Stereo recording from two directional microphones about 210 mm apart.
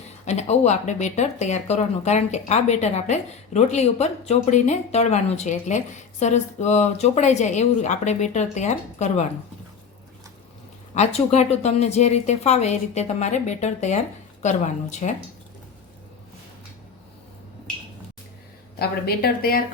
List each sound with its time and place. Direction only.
0.3 s speech: 30° left (ahead or behind)
10.9 s speech: 30° left (ahead or behind)
18.8 s a woman's voice: 50° left (ahead or behind)